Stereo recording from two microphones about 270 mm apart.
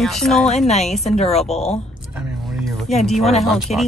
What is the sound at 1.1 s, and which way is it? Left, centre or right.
Speech, left.